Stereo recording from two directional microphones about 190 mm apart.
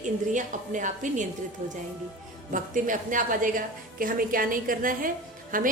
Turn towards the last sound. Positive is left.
turn(degrees=-45)  # may be behind; listen again after turning